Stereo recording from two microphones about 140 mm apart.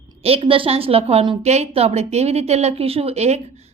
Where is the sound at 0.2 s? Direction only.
40° right (ahead or behind).